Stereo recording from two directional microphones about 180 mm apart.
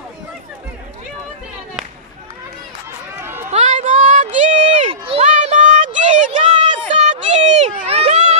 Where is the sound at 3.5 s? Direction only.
40° right (ahead or behind).